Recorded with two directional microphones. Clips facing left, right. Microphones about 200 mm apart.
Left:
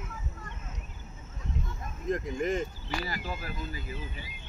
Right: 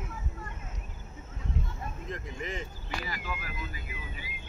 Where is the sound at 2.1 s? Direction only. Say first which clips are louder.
Left 11 dB; 45° left (ahead or behind).